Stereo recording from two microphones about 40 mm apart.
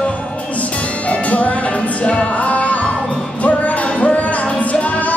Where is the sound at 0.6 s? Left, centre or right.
Left.